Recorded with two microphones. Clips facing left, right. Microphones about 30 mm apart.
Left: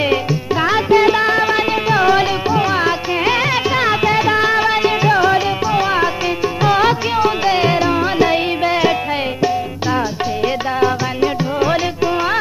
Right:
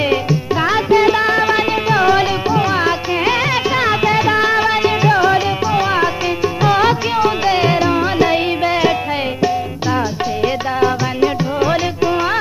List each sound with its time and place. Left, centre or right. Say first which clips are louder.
0.1 s music: right 1 dB; centre
0.8 s music: even; left
1.1 s music: even; centre
10.4 s music: even; centre